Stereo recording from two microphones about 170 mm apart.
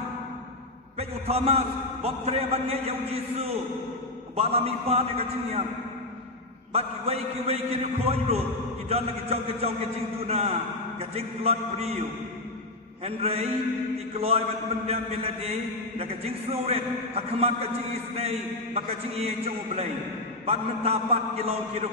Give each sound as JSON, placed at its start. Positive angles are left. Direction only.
{"t": 0.9, "sound": "a man's voice", "side_deg": -35}
{"t": 6.7, "sound": "a man's voice", "side_deg": -35}
{"t": 13.0, "sound": "a man's voice", "side_deg": -35}
{"t": 16.6, "sound": "a man's voice", "side_deg": -35}